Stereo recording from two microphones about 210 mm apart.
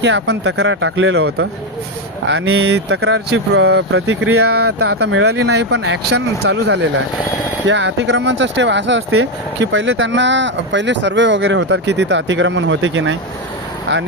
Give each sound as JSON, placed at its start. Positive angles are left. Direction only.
{"t": 0.0, "sound": "speech", "side_deg": -55}